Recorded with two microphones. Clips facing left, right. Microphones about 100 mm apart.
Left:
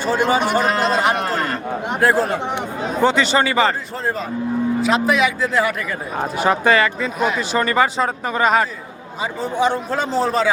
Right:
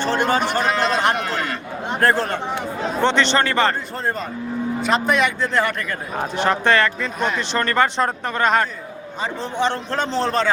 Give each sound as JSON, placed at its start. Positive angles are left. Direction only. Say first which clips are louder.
{"t": 0.0, "sound": "a man's voice", "louder": "left 2 dB", "side_deg": 10}
{"t": 1.2, "sound": "a man's voice", "louder": "left 3 dB", "side_deg": 40}
{"t": 1.9, "sound": "speech", "louder": "left 1 dB", "side_deg": 5}
{"t": 2.4, "sound": "a man's voice", "louder": "left 2 dB", "side_deg": 15}
{"t": 3.0, "sound": "a man's voice", "louder": "left 2 dB", "side_deg": 5}